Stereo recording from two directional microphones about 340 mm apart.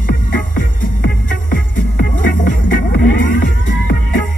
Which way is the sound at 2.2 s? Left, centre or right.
Left.